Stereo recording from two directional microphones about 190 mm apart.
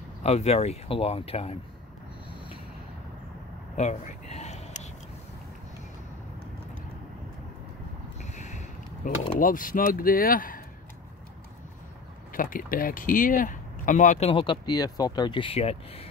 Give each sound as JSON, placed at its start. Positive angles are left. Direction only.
{"t": 0.2, "sound": "speech", "side_deg": 35}
{"t": 3.7, "sound": "a sound", "side_deg": 35}
{"t": 8.2, "sound": "speech", "side_deg": 35}
{"t": 12.3, "sound": "speech", "side_deg": 45}
{"t": 14.3, "sound": "speech", "side_deg": 25}